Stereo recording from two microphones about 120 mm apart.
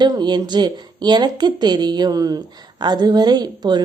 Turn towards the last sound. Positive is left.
turn(degrees=-35)  # may be behind; listen again after turning